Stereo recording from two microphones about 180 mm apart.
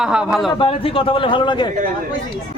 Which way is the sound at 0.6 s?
30° left (ahead or behind).